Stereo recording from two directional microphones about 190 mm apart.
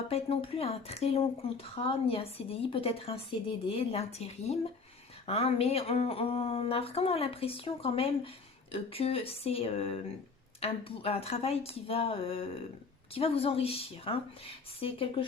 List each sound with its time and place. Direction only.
0.1 s speech: 30° left (ahead or behind)